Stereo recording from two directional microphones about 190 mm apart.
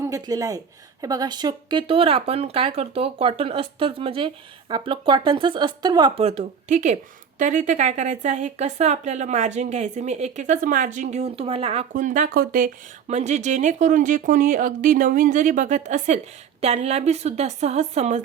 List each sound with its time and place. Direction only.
0.0 s speech: 20° right (ahead or behind); by 18.2 s 35° right (ahead or behind)